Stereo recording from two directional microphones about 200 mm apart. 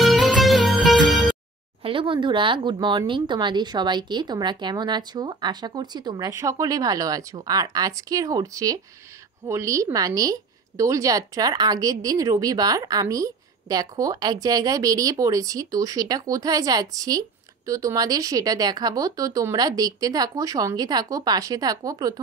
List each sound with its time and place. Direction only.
0.0 s music: centre (ahead or behind)
1.8 s speech: 25° right (ahead or behind)